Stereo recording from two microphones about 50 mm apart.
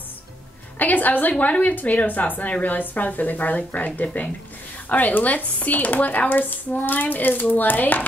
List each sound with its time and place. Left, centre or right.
0.7 s a woman's voice: left